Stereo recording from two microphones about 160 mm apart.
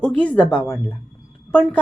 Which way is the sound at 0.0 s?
10° left (ahead or behind).